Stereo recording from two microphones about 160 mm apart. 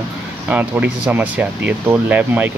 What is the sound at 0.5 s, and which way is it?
Speech, 10° right (ahead or behind).